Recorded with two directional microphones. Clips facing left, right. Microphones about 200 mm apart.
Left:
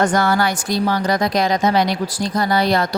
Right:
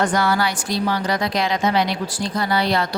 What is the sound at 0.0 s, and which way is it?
A woman's voice, 45° left (ahead or behind).